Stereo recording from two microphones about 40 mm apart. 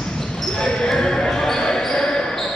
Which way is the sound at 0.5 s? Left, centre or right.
Centre.